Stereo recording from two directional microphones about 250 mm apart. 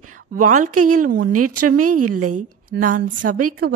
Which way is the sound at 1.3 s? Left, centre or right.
Right.